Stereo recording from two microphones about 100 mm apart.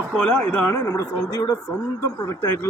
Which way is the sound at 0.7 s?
30° left (ahead or behind).